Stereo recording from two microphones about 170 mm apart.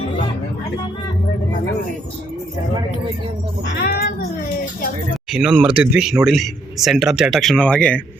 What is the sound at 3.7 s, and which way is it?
Music, 65° left (ahead or behind).